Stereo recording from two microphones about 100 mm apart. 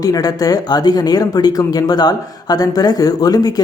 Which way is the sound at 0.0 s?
40° left (ahead or behind).